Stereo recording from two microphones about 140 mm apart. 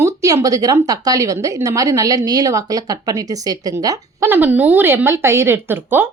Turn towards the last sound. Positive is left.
turn(degrees=-15)  # may be behind; listen again after turning